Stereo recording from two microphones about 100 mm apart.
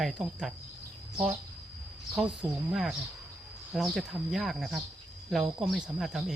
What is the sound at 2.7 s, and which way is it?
Speech, 5° right (ahead or behind).